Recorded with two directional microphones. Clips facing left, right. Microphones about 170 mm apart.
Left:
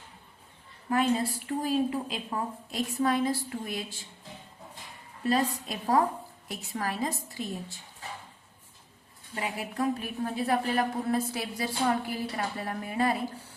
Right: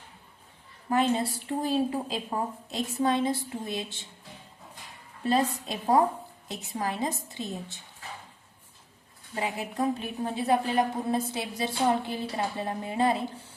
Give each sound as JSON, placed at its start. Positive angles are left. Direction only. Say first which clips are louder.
{"t": 0.9, "sound": "a woman's voice", "louder": "right 1 dB", "side_deg": -30}
{"t": 5.2, "sound": "a woman's voice", "louder": "right 1 dB", "side_deg": -25}
{"t": 9.3, "sound": "a woman's voice", "louder": "right 2 dB", "side_deg": -25}